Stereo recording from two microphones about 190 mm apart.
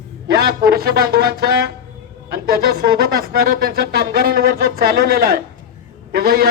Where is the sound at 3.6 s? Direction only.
55° right (ahead or behind).